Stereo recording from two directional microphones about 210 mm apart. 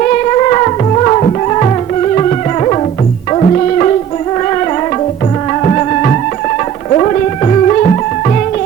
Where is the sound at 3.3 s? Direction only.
30° left (ahead or behind).